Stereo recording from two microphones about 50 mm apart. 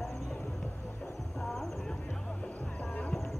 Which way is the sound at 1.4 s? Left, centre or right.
Centre.